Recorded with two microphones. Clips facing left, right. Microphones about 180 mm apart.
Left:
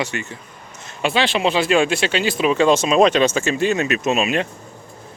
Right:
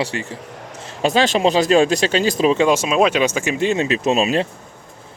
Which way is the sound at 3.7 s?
30° right (ahead or behind).